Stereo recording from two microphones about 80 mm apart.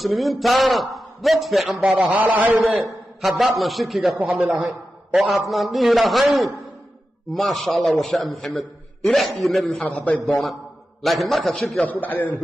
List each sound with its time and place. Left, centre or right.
0.0 s a man's voice: centre
1.8 s a man's voice: centre
3.2 s a man's voice: centre
4.5 s a man's voice: centre
5.1 s a man's voice: centre
9.8 s a man's voice: centre
11.0 s a man's voice: centre
11.8 s a man's voice: left